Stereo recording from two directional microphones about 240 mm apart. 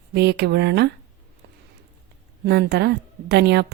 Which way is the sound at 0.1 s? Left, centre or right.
Right.